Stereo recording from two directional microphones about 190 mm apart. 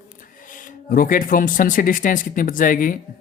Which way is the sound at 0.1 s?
45° left (ahead or behind).